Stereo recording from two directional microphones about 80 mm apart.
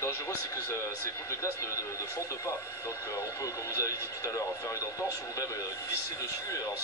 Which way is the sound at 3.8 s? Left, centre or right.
Left.